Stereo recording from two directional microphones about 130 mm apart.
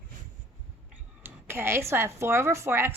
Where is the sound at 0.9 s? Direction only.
15° right (ahead or behind).